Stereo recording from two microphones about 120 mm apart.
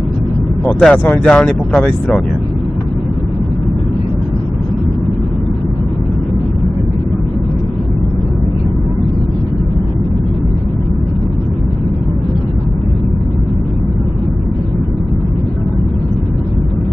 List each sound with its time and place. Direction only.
0.7 s speech: 5° left (ahead or behind)
0.9 s speech: 15° left (ahead or behind)